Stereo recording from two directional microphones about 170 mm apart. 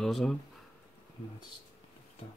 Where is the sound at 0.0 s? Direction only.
Centre (ahead or behind).